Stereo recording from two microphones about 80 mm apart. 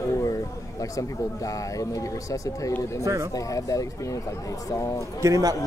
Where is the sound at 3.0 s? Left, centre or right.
Right.